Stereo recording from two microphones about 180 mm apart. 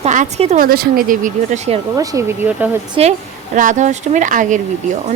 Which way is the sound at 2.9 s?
40° right (ahead or behind).